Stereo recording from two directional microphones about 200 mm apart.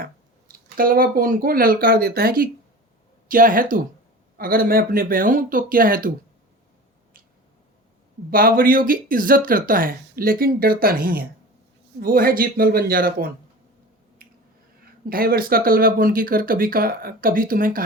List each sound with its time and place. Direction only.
0.0 s speech: 45° right (ahead or behind)
8.3 s speech: 45° right (ahead or behind)
14.2 s finger snapping: 45° right (ahead or behind)
15.1 s speech: 50° right (ahead or behind)